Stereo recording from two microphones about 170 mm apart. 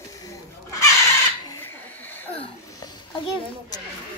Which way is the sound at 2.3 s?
35° left (ahead or behind).